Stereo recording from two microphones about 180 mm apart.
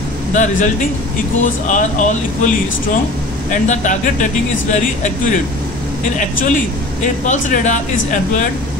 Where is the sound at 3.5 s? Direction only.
45° left (ahead or behind).